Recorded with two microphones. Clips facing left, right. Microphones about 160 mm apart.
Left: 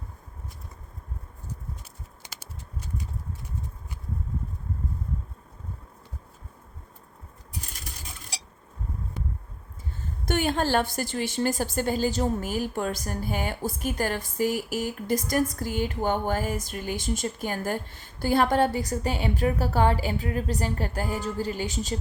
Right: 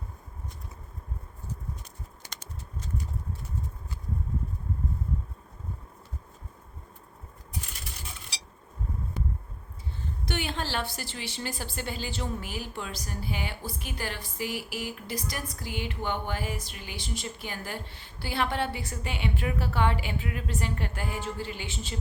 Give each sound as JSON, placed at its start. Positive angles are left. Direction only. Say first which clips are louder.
{"t": 10.2, "sound": "a woman's voice", "louder": "left 8 dB", "side_deg": 50}